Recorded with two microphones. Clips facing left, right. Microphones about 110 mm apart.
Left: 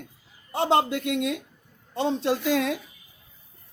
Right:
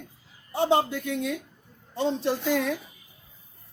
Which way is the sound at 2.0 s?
80° left.